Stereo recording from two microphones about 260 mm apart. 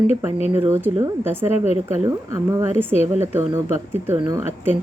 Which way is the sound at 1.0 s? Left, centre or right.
Centre.